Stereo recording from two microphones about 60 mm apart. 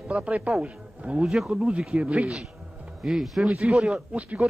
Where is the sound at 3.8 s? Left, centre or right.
Right.